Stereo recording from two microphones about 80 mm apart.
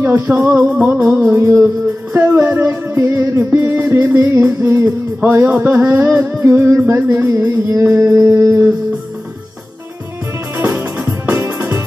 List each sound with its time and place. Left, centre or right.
0.0 s music: right
0.6 s music: centre
1.3 s music: right
10.6 s music: right